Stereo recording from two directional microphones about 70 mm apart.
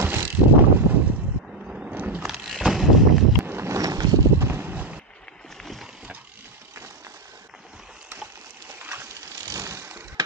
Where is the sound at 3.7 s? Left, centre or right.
Right.